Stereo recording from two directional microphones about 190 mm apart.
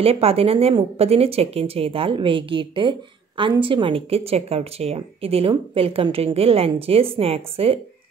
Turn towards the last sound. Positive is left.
turn(degrees=-30)  # may be behind; listen again after turning